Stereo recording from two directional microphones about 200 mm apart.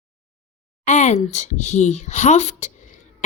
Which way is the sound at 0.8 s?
35° left (ahead or behind).